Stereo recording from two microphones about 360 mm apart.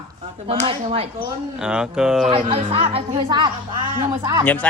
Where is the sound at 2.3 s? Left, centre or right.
Centre.